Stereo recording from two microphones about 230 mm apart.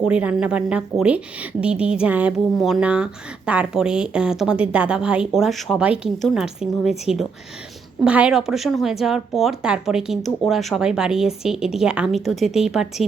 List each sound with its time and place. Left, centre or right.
0.0 s a woman's voice: centre